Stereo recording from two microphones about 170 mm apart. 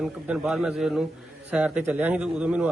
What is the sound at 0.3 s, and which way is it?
A man's voice, 5° right (ahead or behind).